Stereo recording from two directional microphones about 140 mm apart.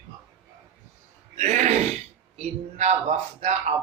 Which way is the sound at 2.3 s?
55° right (ahead or behind).